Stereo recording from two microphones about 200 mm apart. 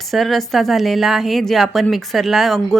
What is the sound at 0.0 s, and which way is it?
A woman's voice, centre (ahead or behind).